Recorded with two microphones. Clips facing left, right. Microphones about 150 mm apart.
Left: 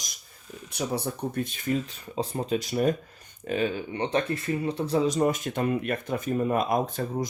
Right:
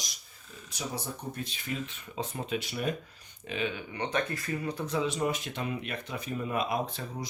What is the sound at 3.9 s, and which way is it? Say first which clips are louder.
Speech: left 4 dB; 30° left (ahead or behind).